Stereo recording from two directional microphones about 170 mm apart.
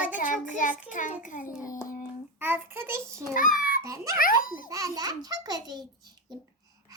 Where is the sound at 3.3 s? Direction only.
50° left (ahead or behind).